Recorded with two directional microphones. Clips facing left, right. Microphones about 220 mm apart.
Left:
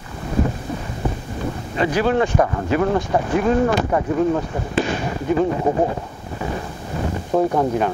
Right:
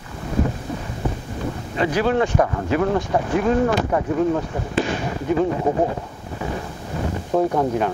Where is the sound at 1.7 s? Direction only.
20° left (ahead or behind).